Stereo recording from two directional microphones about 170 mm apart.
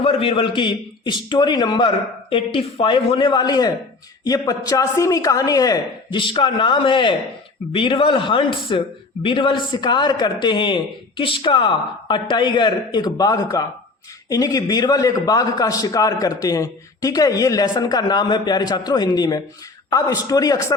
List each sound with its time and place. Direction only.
0.0 s a man's voice: 35° left (ahead or behind)